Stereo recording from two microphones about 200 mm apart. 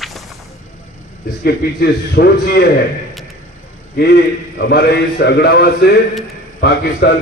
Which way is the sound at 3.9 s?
55° left (ahead or behind).